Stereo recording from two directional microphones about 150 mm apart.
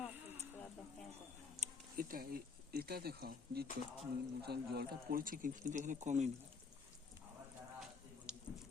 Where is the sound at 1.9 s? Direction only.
70° right (ahead or behind); by 6.3 s 50° right (ahead or behind).